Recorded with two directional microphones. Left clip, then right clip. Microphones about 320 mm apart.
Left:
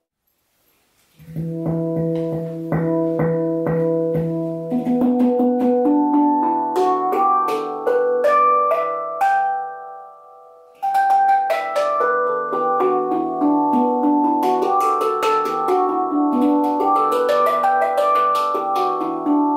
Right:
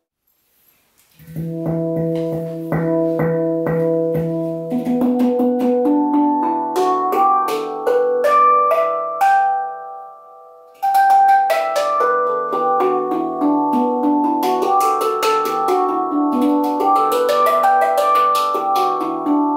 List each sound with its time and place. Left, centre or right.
1.6 s music: centre
2.3 s music: centre
11.1 s music: centre